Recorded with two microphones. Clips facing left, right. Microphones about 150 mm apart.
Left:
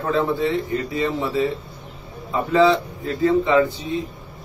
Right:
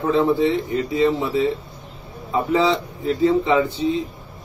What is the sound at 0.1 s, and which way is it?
A man's voice, 20° right (ahead or behind).